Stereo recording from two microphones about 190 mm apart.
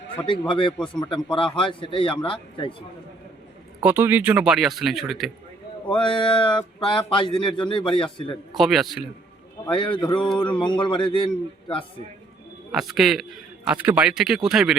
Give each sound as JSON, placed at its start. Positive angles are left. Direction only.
{"t": 0.3, "sound": "speech", "side_deg": 25}
{"t": 3.8, "sound": "a man's voice", "side_deg": -10}
{"t": 6.0, "sound": "speech", "side_deg": 25}
{"t": 8.5, "sound": "a man's voice", "side_deg": 0}
{"t": 9.7, "sound": "speech", "side_deg": 25}
{"t": 12.7, "sound": "a man's voice", "side_deg": 0}